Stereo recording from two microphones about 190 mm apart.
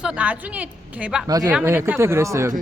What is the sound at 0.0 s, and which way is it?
Speech, 5° right (ahead or behind).